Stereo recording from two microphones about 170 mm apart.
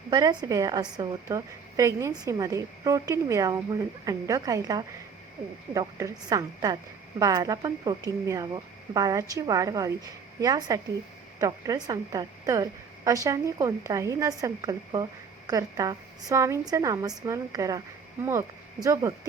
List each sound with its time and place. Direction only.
0.1 s a woman's voice: 25° right (ahead or behind)